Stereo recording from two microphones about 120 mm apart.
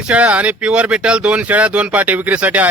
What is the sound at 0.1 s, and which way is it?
Speech, 10° right (ahead or behind).